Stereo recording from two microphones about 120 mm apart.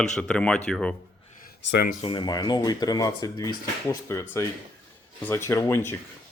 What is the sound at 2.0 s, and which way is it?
Speech, 45° left (ahead or behind).